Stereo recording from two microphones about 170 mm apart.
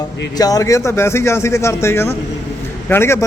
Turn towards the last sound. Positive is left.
turn(degrees=15)  # may be behind; listen again after turning